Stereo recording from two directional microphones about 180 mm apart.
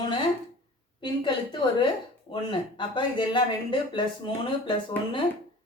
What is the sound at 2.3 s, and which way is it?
Speech, 25° left (ahead or behind).